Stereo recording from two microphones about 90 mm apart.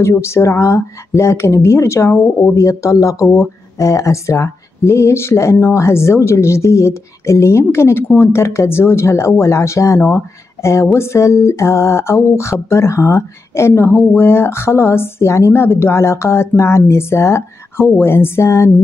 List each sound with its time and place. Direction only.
0.0 s speech: 30° left (ahead or behind)